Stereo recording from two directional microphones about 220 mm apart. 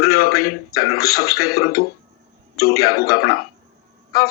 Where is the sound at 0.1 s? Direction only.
45° left (ahead or behind).